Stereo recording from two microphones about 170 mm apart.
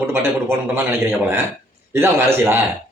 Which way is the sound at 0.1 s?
15° right (ahead or behind).